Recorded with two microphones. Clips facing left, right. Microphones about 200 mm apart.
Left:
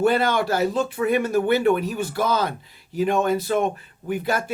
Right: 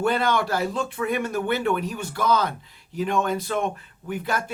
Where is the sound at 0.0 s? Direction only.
5° left (ahead or behind).